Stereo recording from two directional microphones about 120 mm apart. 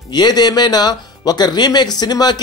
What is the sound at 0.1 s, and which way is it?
Speech, 35° left (ahead or behind).